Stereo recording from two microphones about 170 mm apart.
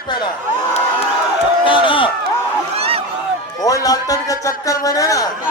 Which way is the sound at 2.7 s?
35° right (ahead or behind).